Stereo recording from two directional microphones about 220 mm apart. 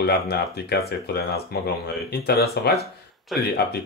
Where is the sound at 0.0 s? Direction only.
45° left (ahead or behind).